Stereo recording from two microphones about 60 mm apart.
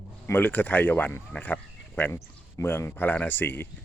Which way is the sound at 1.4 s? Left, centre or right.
Left.